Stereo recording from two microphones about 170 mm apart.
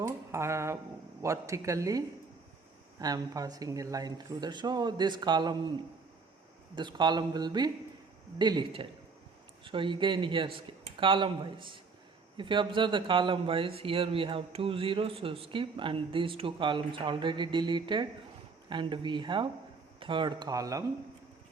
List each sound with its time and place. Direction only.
0.0 s a sound: 15° right (ahead or behind)
1.2 s speech: 15° right (ahead or behind)
6.7 s a man's voice: 25° right (ahead or behind)